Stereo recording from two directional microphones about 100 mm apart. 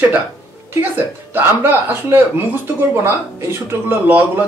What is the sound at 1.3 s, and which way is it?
Speech, 20° right (ahead or behind).